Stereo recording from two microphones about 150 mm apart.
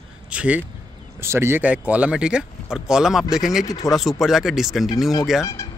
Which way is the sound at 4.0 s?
Centre (ahead or behind).